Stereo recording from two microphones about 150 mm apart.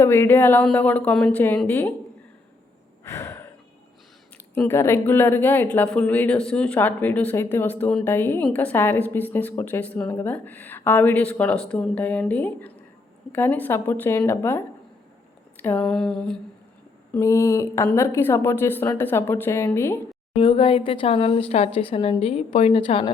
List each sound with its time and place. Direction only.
0.0 s a woman's voice: 15° left (ahead or behind)
3.0 s gasp: 15° left (ahead or behind)
4.5 s a woman's voice: 15° left (ahead or behind)
15.5 s a sound: 15° left (ahead or behind)
17.1 s mantra: 20° left (ahead or behind)
17.9 s a woman's voice: 20° left (ahead or behind)
20.3 s a woman's voice: 35° left (ahead or behind)